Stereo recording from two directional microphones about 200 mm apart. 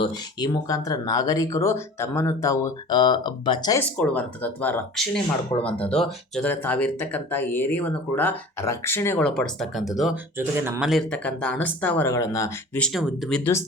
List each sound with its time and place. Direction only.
0.0 s speech: 20° left (ahead or behind)
3.8 s speech: 5° left (ahead or behind)
12.8 s speech: centre (ahead or behind)